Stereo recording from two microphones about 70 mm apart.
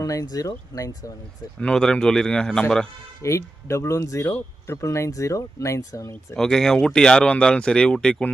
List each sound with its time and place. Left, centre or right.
0.0 s speech: left
1.6 s speech: centre
3.2 s speech: left
6.3 s speech: centre